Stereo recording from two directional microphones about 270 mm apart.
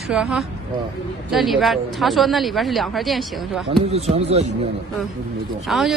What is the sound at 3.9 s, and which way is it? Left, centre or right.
Speech, right.